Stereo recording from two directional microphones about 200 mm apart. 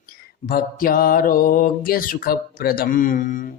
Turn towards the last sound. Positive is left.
turn(degrees=40)  # may be behind; listen again after turning